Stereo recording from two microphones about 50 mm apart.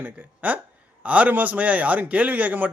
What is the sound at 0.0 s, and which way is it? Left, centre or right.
A man's voice, right.